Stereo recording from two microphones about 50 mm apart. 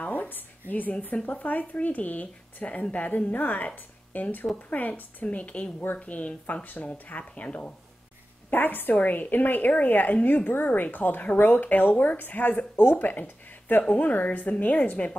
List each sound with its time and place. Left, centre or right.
0.0 s a sound: left
1.3 s a woman's voice: left
8.5 s a woman's voice: left